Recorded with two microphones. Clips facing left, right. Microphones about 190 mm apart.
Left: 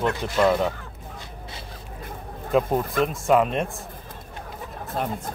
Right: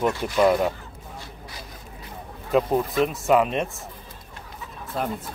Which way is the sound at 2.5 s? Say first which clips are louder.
Right 1 dB; centre (ahead or behind).